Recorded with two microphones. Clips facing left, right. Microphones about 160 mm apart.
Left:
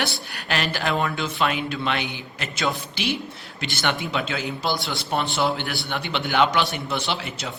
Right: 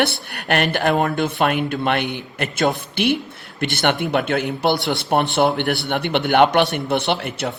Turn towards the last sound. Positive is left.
turn(degrees=-60)  # may be behind; listen again after turning